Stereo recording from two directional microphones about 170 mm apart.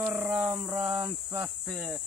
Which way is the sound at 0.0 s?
5° right (ahead or behind).